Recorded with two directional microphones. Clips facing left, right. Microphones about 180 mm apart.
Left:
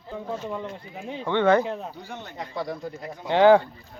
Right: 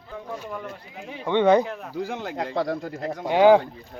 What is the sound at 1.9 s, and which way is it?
Speech, 90° right.